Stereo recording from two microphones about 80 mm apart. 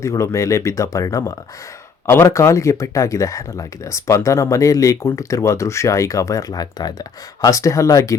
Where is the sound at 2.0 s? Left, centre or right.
Left.